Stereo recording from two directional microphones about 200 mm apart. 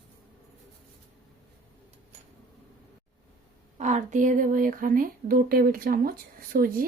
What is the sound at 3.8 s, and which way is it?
Speech, 35° right (ahead or behind).